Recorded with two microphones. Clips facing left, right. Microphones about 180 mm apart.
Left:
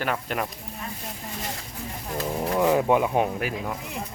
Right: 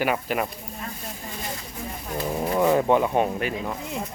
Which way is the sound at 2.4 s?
Centre (ahead or behind).